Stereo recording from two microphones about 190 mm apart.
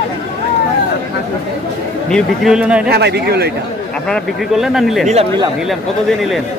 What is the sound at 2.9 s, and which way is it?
Speech, 60° right (ahead or behind).